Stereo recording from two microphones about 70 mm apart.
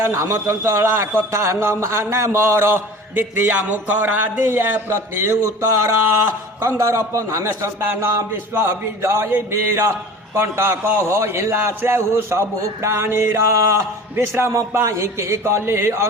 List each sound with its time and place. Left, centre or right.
0.0 s a man's voice: right